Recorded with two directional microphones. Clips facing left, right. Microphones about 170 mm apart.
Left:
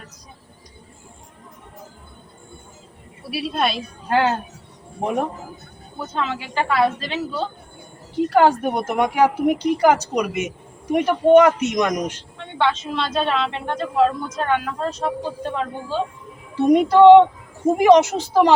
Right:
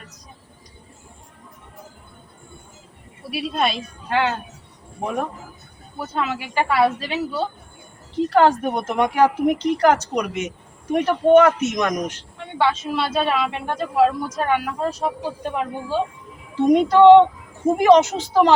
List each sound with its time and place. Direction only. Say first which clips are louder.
3.2 s a woman's voice: even; centre (ahead or behind)
4.1 s speech: left 3 dB; 40° left (ahead or behind)
6.0 s a woman's voice: right 1 dB; 10° right (ahead or behind)
8.3 s speech: even; 10° left (ahead or behind)
12.4 s a woman's voice: even; 5° right (ahead or behind)
16.6 s speech: left 1 dB; 10° left (ahead or behind)